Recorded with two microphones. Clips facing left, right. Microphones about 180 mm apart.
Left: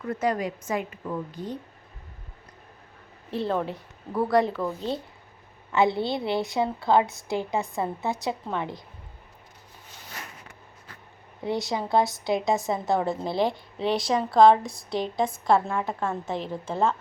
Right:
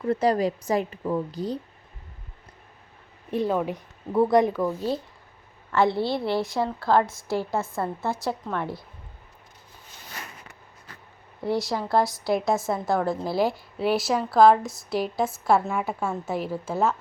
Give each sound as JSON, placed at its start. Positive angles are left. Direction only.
{"t": 0.0, "sound": "a woman's voice", "side_deg": -30}
{"t": 3.3, "sound": "speech", "side_deg": -10}
{"t": 4.1, "sound": "a woman's voice", "side_deg": -20}
{"t": 11.4, "sound": "a woman's voice", "side_deg": 0}